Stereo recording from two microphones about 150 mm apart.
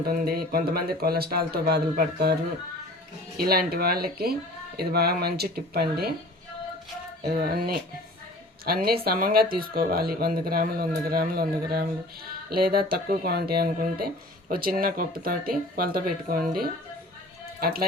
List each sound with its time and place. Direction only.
0.0 s speech: 90° right
3.3 s speech: 90° right
7.2 s speech: 90° right
14.5 s speech: 75° right (ahead or behind)